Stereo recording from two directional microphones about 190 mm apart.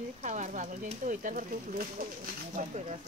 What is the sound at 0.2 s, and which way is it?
Speech, 40° right (ahead or behind).